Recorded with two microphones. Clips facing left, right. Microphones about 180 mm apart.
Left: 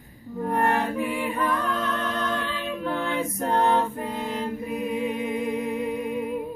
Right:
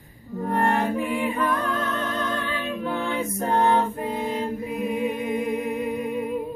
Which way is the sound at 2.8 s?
5° right (ahead or behind).